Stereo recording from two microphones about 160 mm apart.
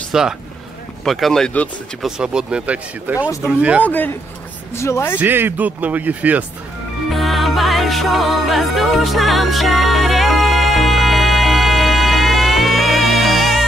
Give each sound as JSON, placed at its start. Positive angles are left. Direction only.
{"t": 0.1, "sound": "speech", "side_deg": -5}
{"t": 2.0, "sound": "speech", "side_deg": -5}
{"t": 3.8, "sound": "speech", "side_deg": 10}
{"t": 5.2, "sound": "speech", "side_deg": -10}
{"t": 7.1, "sound": "music", "side_deg": 0}